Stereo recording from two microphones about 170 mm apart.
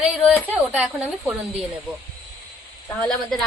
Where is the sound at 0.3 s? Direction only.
5° right (ahead or behind).